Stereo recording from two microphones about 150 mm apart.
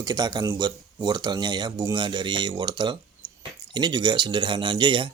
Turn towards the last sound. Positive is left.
turn(degrees=-30)  # may be behind; listen again after turning